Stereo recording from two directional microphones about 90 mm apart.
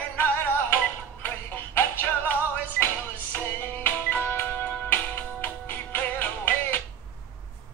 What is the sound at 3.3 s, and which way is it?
Music, 20° left (ahead or behind).